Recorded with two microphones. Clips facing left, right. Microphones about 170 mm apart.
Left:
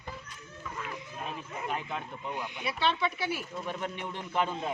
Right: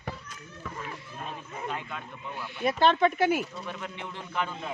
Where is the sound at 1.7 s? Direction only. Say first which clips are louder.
Left 2 dB; 25° left (ahead or behind).